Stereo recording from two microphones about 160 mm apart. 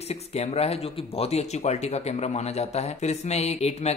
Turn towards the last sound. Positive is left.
turn(degrees=40)  # may be behind; listen again after turning